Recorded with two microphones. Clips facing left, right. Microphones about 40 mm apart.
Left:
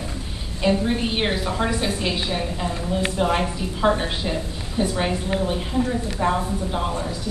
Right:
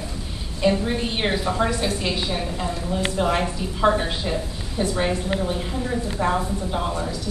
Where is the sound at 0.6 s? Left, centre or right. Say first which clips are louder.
Even; centre.